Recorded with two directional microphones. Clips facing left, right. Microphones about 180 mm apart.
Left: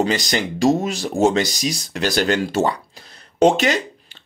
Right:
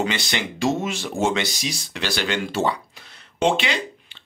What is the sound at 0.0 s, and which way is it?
Speech, 40° left (ahead or behind).